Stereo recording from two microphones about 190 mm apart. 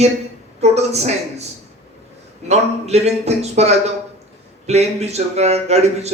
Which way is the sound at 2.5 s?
35° right (ahead or behind).